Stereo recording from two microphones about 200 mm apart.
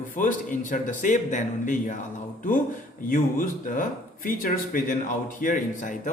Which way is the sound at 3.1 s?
45° left (ahead or behind).